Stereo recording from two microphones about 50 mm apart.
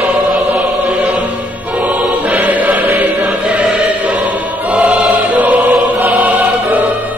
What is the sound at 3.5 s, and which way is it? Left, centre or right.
Music, right.